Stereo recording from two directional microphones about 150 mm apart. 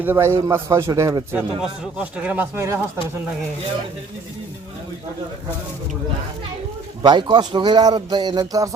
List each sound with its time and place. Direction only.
0.0 s speech: 15° right (ahead or behind)
1.4 s speech: 5° right (ahead or behind)
7.0 s speech: 30° right (ahead or behind)